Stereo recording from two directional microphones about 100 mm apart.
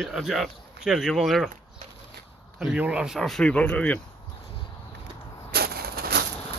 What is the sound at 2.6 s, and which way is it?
Speech, 10° right (ahead or behind).